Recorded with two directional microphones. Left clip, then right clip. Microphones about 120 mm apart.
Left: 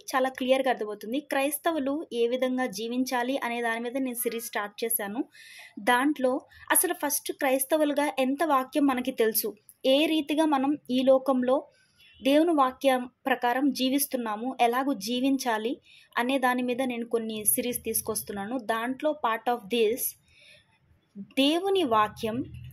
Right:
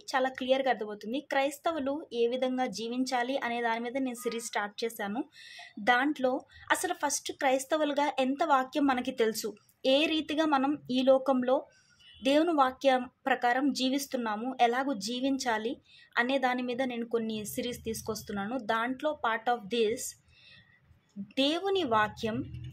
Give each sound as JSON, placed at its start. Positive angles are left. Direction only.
{"t": 0.0, "sound": "a woman's voice", "side_deg": 25}
{"t": 21.4, "sound": "a woman's voice", "side_deg": 20}